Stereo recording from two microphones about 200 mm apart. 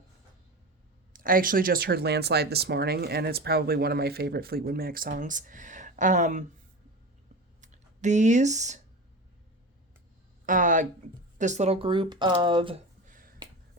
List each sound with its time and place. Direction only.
1.1 s speech: 45° right (ahead or behind)
7.6 s speech: 35° right (ahead or behind)
10.4 s speech: 40° right (ahead or behind); by 12.8 s 25° right (ahead or behind)
13.1 s finger snapping: 45° right (ahead or behind)